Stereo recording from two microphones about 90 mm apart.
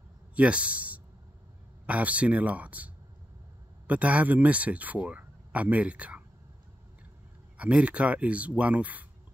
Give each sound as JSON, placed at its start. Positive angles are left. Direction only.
{"t": 0.4, "sound": "a man's voice", "side_deg": -15}
{"t": 7.5, "sound": "speech", "side_deg": -15}